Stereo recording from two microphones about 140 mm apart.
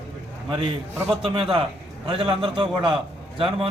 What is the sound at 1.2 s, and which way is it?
A man's voice, 40° right (ahead or behind).